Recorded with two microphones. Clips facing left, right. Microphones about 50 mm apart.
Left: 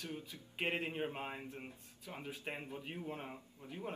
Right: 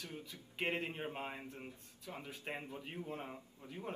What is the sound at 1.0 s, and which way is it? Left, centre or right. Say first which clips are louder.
Speech: left 2 dB; left.